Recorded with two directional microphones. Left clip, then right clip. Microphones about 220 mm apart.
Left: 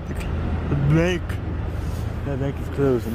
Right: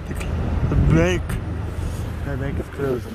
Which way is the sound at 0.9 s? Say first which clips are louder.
Right 2 dB; centre (ahead or behind).